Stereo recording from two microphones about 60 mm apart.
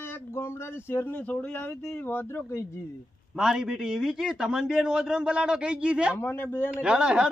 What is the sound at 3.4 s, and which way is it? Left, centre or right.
A man's voice, centre.